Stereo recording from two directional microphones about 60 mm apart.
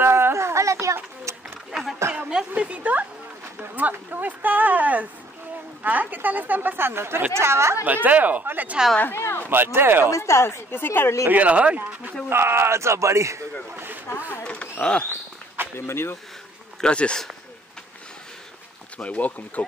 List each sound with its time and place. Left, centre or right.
0.0 s a sound: right
2.5 s a woman's voice: right
7.8 s speech: right
9.0 s a woman's voice: left
9.5 s a woman's voice: right
10.0 s a woman's voice: left
11.2 s speech: right
12.3 s speech: right
13.7 s a sound: right
14.4 s a sound: centre
15.6 s a sound: right
15.9 s a woman's voice: left
16.8 s speech: centre
18.9 s speech: left